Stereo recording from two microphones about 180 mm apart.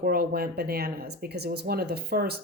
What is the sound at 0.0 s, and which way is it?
A woman's voice, 55° right (ahead or behind).